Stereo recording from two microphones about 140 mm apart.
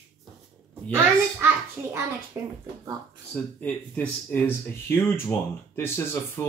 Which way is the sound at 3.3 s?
10° left (ahead or behind).